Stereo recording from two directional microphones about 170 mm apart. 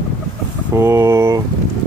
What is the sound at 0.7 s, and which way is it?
Speech, 15° right (ahead or behind).